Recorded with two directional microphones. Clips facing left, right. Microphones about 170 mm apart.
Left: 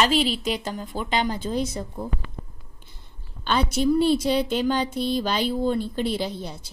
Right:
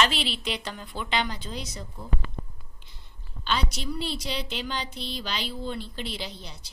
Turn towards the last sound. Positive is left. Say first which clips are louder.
# left 10 dB
turn(degrees=50)  # may be behind; listen again after turning